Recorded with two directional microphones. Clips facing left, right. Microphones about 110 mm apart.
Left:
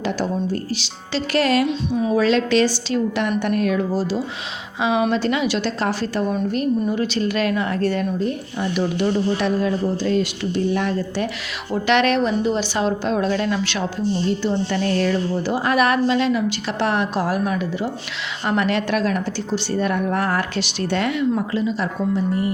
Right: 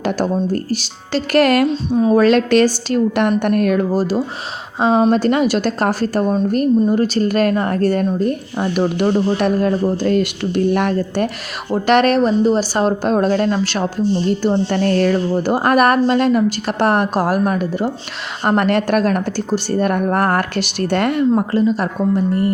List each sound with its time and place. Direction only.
0.0 s speech: 50° right (ahead or behind)
1.6 s speech: 40° right (ahead or behind); by 11.3 s 55° right (ahead or behind)
11.7 s speech: 45° right (ahead or behind)